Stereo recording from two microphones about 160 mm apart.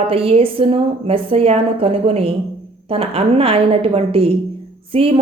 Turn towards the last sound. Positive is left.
turn(degrees=-35)  # may be behind; listen again after turning